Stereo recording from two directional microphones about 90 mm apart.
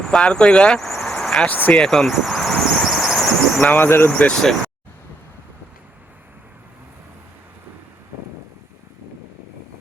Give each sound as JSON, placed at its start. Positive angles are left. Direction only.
{"t": 0.0, "sound": "vehicle", "side_deg": 5}
{"t": 1.5, "sound": "speech", "side_deg": 20}
{"t": 1.8, "sound": "squeal", "side_deg": 5}
{"t": 3.6, "sound": "speech", "side_deg": 20}
{"t": 4.1, "sound": "speech", "side_deg": 10}